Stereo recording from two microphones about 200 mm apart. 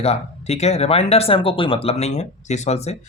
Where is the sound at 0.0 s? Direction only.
30° left (ahead or behind).